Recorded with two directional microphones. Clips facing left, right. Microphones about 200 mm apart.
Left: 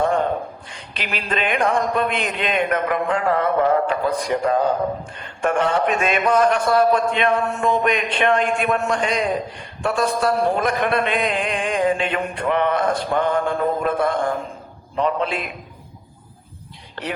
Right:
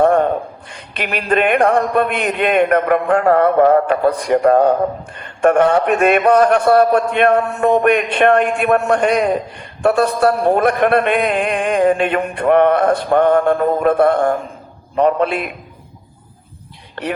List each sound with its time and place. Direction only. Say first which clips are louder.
0.0 s a sound: right 7 dB; 60° right (ahead or behind)
0.7 s a man's voice: right 8 dB; 55° right (ahead or behind)
16.9 s speech: right 5 dB; 60° right (ahead or behind)